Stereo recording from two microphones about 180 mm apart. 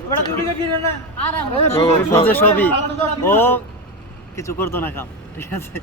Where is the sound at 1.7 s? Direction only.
15° left (ahead or behind).